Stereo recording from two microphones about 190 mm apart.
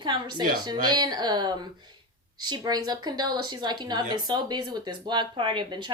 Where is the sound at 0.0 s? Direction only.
25° right (ahead or behind).